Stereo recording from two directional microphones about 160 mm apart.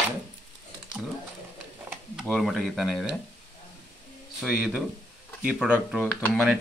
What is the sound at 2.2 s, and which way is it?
Speech, centre (ahead or behind).